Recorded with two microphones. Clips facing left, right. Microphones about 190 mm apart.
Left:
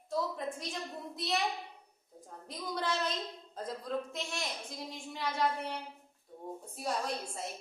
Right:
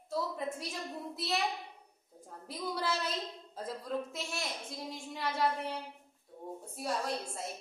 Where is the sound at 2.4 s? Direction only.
5° right (ahead or behind).